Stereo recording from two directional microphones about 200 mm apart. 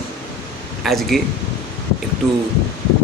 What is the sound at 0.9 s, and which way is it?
Speech, centre (ahead or behind).